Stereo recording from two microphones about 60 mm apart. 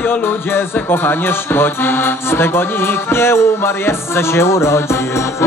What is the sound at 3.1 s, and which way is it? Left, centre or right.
Music, left.